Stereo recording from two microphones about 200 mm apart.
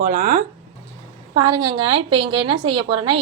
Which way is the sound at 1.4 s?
25° right (ahead or behind).